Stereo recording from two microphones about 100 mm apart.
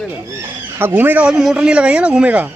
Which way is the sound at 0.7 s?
20° right (ahead or behind).